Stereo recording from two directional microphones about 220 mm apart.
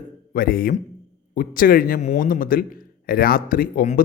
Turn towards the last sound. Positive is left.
turn(degrees=40)  # may be behind; listen again after turning